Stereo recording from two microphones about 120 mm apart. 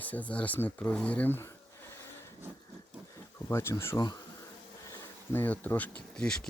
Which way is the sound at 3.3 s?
20° left (ahead or behind).